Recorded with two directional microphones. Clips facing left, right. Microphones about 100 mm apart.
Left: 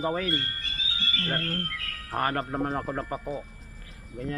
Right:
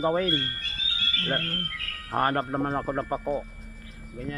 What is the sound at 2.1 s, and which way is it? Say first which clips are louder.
Speech: right 3 dB; 30° right (ahead or behind).